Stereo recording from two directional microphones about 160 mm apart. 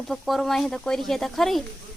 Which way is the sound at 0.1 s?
Centre (ahead or behind).